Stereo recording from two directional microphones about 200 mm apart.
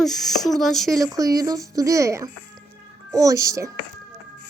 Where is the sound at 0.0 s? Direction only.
Centre (ahead or behind).